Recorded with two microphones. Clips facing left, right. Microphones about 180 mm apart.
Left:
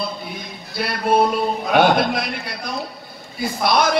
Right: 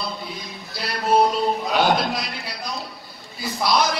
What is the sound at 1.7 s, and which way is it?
A man's voice, 55° left (ahead or behind).